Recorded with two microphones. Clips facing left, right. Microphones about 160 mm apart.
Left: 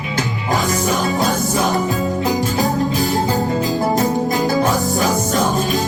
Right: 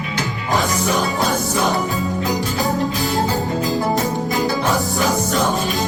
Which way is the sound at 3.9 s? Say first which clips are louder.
Left 3 dB; 40° left (ahead or behind).